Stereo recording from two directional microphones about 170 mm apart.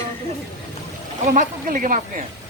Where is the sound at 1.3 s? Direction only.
50° right (ahead or behind).